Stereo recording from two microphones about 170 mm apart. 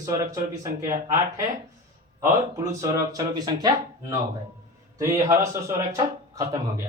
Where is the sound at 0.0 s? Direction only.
20° right (ahead or behind).